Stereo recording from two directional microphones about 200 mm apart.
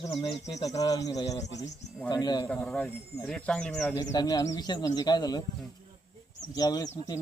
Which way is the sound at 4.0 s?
15° left (ahead or behind).